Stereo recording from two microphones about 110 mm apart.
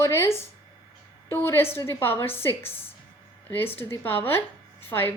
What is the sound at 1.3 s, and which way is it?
A woman's voice, 20° left (ahead or behind).